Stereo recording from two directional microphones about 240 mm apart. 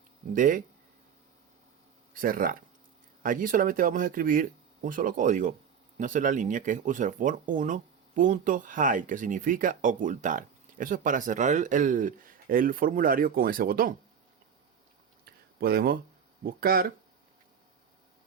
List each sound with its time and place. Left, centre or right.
0.3 s speech: right
2.1 s speech: right
15.2 s a sound: right
16.4 s speech: right